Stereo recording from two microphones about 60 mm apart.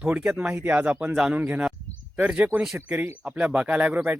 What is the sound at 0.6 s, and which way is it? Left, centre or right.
Speech, right.